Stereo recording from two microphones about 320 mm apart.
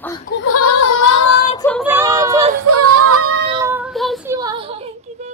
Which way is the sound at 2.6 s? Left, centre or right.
Right.